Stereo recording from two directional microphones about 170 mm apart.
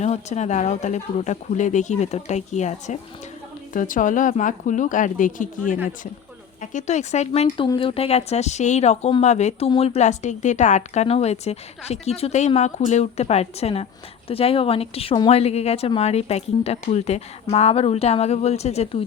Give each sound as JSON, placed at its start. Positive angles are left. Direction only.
{"t": 0.0, "sound": "speech", "side_deg": 40}